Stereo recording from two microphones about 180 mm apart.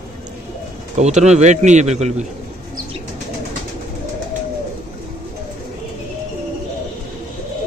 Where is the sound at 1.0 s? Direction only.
40° right (ahead or behind).